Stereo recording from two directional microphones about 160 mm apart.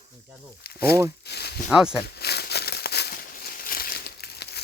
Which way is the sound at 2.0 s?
90° left.